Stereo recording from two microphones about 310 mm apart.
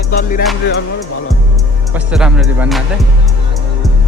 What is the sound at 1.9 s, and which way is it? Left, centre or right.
Speech, centre.